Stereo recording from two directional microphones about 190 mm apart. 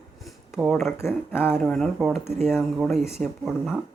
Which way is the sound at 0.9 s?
10° left (ahead or behind).